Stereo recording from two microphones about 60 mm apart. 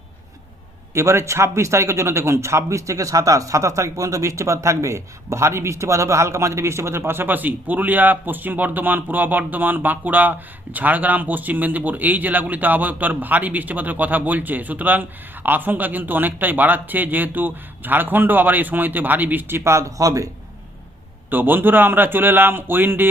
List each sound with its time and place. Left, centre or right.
0.9 s speech: right
19.7 s speech: right
21.2 s speech: right